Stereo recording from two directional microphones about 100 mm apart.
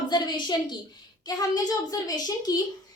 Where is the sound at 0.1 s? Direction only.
50° left (ahead or behind).